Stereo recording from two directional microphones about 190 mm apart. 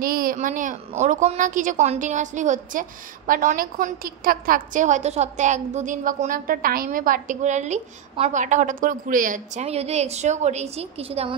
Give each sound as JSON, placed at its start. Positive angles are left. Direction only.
{"t": 0.0, "sound": "a woman's voice", "side_deg": -50}